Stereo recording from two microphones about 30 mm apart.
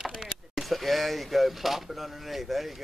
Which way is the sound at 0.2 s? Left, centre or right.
Centre.